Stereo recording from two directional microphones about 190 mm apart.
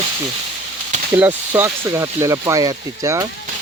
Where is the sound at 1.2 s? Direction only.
10° right (ahead or behind).